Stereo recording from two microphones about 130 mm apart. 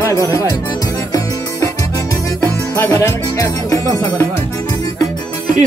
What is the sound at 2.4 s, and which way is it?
Music, 20° left (ahead or behind).